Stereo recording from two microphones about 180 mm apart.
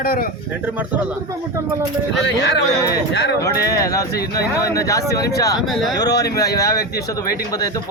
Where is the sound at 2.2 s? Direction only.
75° left (ahead or behind).